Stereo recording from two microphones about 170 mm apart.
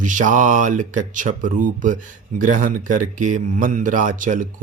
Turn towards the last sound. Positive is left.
turn(degrees=-50)  # may be behind; listen again after turning